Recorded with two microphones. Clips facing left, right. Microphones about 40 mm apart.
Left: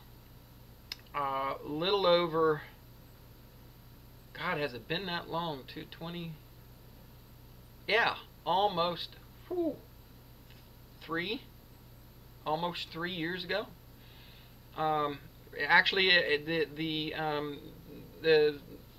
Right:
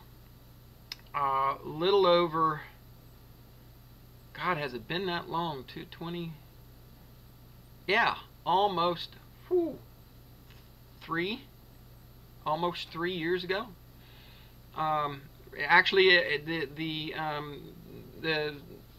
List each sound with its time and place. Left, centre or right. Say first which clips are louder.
0.8 s speech: right 4 dB; centre
4.3 s speech: right 2 dB; centre
7.8 s speech: right 2 dB; centre
11.0 s speech: right 3 dB; centre
12.4 s speech: right 3 dB; centre